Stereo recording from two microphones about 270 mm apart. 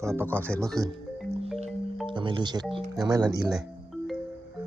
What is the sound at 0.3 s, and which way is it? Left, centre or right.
Speech, centre.